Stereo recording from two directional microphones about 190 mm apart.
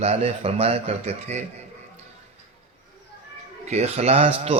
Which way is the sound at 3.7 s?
35° right (ahead or behind).